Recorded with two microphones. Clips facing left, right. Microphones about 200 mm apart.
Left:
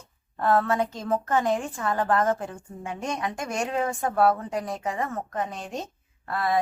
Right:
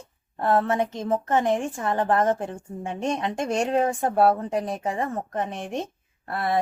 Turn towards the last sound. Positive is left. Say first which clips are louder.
# even
turn(degrees=-30)  # may be behind; listen again after turning